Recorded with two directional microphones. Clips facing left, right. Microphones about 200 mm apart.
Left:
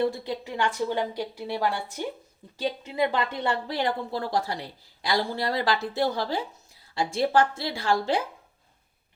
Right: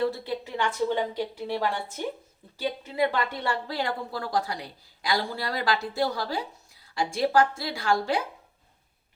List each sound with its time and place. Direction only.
0.0 s a woman's voice: 15° left (ahead or behind)